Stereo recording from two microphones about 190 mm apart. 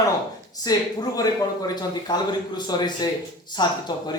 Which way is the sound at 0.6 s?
20° left (ahead or behind).